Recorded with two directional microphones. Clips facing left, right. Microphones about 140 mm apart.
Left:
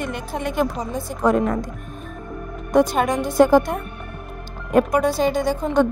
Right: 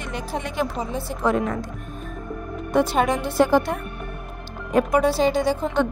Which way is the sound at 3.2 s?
45° left (ahead or behind).